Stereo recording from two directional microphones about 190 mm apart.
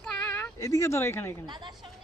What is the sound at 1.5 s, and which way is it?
Speech, 25° right (ahead or behind).